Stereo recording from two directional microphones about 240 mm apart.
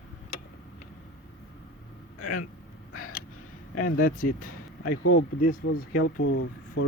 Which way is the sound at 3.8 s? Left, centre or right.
Left.